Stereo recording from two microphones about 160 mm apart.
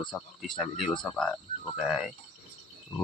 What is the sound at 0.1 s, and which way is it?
Speech, 10° left (ahead or behind).